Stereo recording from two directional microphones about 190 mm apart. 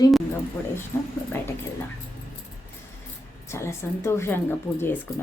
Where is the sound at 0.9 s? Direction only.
10° left (ahead or behind).